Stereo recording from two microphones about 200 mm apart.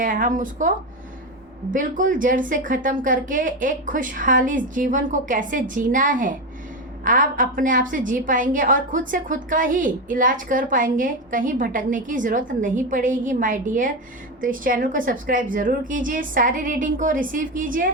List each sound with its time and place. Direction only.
0.0 s a woman's voice: 40° right (ahead or behind)
1.7 s a woman's voice: 40° right (ahead or behind)